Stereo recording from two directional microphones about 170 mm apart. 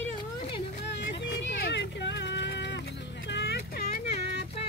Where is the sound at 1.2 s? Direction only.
90° left.